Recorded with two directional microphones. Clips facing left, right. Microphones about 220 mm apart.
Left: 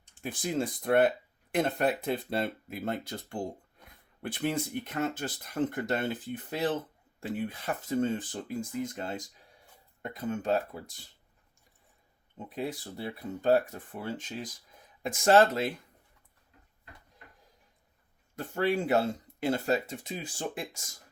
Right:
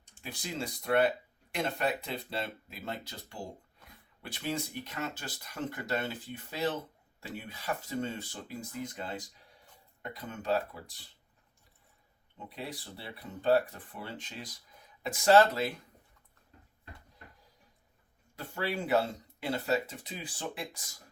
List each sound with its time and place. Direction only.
0.2 s speech: 50° left (ahead or behind)
12.5 s speech: 45° left (ahead or behind)
18.3 s speech: 50° left (ahead or behind)